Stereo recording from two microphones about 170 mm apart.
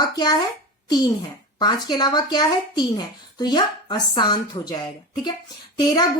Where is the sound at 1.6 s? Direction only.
25° left (ahead or behind).